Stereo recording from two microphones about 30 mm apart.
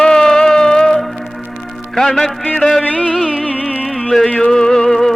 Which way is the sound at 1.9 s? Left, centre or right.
Centre.